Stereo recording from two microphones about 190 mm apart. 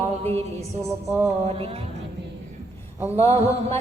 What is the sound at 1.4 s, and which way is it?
Music, 30° right (ahead or behind).